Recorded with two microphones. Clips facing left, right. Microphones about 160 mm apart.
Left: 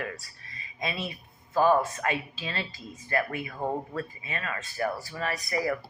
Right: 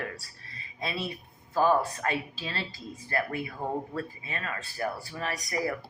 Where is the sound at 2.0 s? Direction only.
35° right (ahead or behind).